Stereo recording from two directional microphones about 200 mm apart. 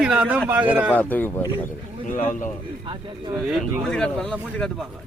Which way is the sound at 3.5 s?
5° left (ahead or behind).